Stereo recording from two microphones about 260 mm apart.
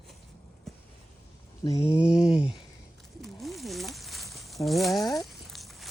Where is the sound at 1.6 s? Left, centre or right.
Centre.